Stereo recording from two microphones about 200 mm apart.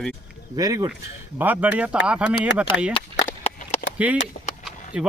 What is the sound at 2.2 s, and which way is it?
Speech, 60° left (ahead or behind).